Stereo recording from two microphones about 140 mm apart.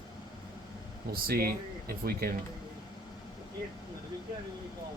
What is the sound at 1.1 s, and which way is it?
Speech, 90° right.